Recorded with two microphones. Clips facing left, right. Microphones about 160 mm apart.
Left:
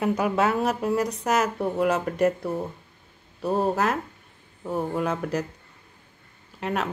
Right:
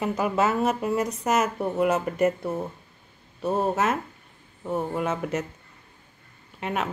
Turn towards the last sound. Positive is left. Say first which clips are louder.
# left 1 dB
turn(degrees=0)  # may be behind; listen again after turning